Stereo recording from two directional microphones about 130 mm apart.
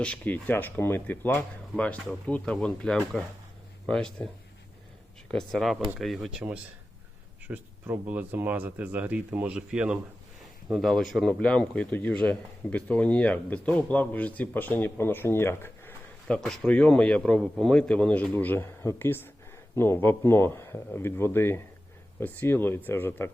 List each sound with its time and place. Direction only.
0.0 s speech: 10° left (ahead or behind)
5.3 s speech: 5° left (ahead or behind)
16.2 s speech: 5° left (ahead or behind)